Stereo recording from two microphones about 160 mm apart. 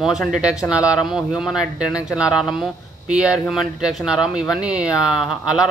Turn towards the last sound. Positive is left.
turn(degrees=-5)  # may be behind; listen again after turning